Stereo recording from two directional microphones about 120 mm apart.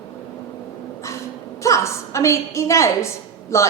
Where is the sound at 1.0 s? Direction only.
25° left (ahead or behind).